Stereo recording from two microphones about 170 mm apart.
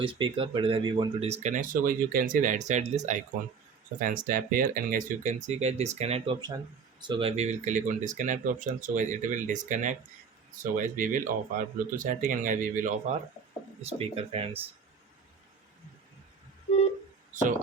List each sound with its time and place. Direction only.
0.0 s speech: 30° right (ahead or behind); by 13.1 s 50° right (ahead or behind)
13.8 s speech: 35° right (ahead or behind)